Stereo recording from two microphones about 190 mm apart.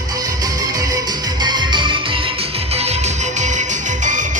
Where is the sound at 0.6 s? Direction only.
20° right (ahead or behind).